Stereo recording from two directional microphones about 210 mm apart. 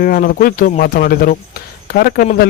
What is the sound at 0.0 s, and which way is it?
Speech, 45° left (ahead or behind).